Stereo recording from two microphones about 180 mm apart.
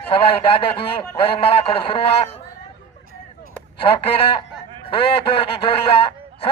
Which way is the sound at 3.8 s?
30° left (ahead or behind).